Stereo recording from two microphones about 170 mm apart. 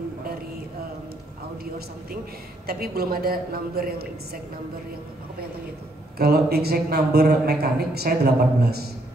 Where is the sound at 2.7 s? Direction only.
65° right (ahead or behind).